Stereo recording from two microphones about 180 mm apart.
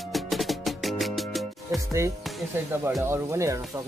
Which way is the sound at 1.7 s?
15° right (ahead or behind).